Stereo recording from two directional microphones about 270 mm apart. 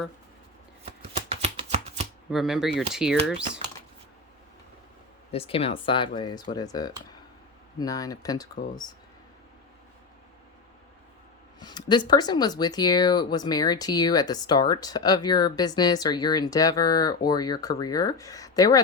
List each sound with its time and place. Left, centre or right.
1.3 s shuffling cards: right
2.3 s speech: centre
5.3 s speech: left
11.6 s speech: centre